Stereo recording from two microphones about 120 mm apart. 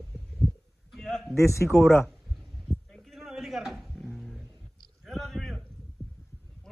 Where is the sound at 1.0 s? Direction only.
5° left (ahead or behind).